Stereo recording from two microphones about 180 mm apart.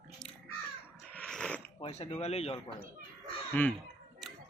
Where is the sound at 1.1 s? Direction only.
5° left (ahead or behind).